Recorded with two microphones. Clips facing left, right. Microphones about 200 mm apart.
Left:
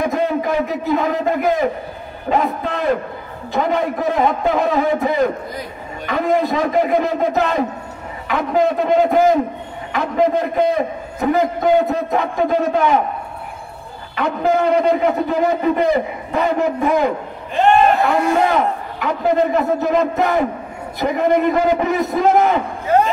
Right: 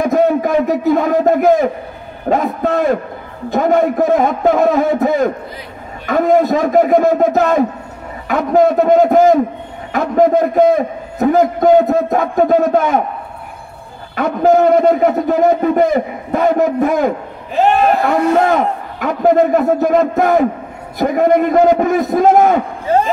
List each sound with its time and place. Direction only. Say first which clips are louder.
0.0 s a sound: right 6 dB; 45° right (ahead or behind)
2.2 s a man's voice: right 4 dB; 45° right (ahead or behind)
14.1 s a man's voice: right 6 dB; 45° right (ahead or behind)
17.6 s speech: right 1 dB; 5° right (ahead or behind)
18.9 s a man's voice: right 5 dB; 45° right (ahead or behind)